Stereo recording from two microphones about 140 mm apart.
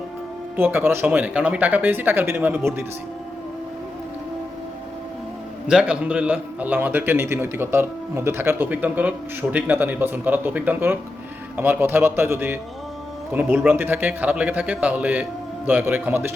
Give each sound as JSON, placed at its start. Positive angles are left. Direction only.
{"t": 0.5, "sound": "a man's voice", "side_deg": -15}
{"t": 5.6, "sound": "a man's voice", "side_deg": -5}